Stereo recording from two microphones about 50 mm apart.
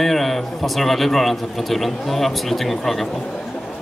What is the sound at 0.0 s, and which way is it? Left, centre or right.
A man's voice, centre.